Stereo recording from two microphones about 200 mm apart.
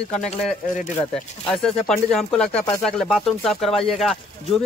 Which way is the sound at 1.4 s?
5° left (ahead or behind).